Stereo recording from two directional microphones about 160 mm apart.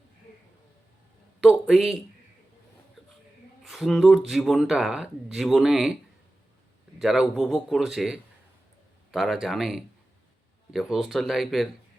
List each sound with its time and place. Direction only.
1.4 s speech: 5° right (ahead or behind)
3.6 s speech: centre (ahead or behind)
7.0 s speech: centre (ahead or behind)